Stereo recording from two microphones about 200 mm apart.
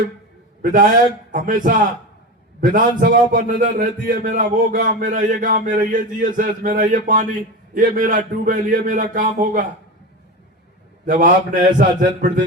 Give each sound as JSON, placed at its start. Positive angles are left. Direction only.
{"t": 0.6, "sound": "a man's voice", "side_deg": -45}
{"t": 11.0, "sound": "a man's voice", "side_deg": -40}